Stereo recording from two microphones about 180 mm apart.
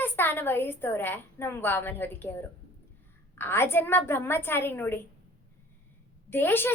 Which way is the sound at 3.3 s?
15° left (ahead or behind).